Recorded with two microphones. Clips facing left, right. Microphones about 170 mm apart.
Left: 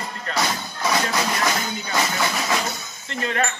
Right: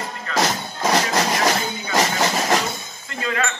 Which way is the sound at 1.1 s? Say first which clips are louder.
Right 3 dB; 40° right (ahead or behind).